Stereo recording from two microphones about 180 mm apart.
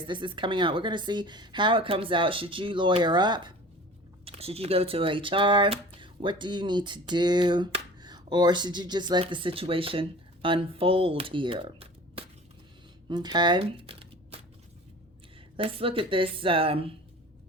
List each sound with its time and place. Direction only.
0.0 s speech: 25° right (ahead or behind)
13.1 s a sound: 25° right (ahead or behind)
15.5 s a woman's voice: 30° right (ahead or behind)